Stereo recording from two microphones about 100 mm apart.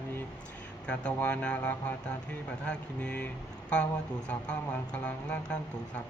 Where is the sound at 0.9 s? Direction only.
15° left (ahead or behind).